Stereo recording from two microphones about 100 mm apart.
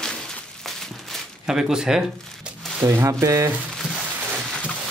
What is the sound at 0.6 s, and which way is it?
Crumpling, 5° left (ahead or behind).